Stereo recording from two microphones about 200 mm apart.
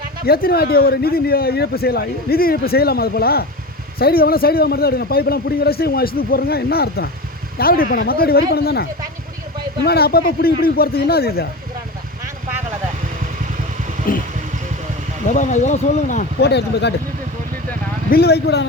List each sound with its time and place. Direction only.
0.3 s a man's voice: 50° left (ahead or behind)
14.1 s vehicle: 45° left (ahead or behind)
15.3 s speech: 35° left (ahead or behind)
16.4 s speech: 55° left (ahead or behind)
18.1 s speech: 55° left (ahead or behind)